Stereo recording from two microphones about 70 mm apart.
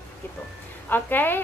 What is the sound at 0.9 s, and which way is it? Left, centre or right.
Speech, left.